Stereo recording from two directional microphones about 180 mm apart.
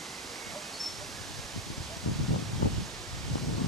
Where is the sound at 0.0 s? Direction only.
Centre (ahead or behind).